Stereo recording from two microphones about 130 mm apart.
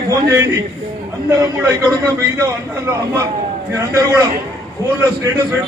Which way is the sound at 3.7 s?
25° right (ahead or behind).